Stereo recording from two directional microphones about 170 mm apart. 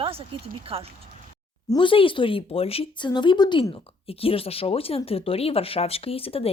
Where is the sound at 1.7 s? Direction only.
30° left (ahead or behind).